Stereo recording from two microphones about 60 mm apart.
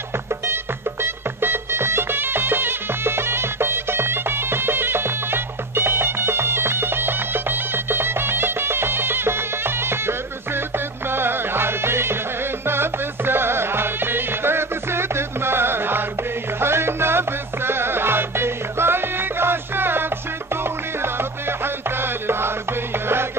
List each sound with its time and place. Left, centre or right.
1.0 s music: right